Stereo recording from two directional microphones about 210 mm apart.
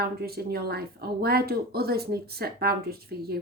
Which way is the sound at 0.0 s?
50° right (ahead or behind).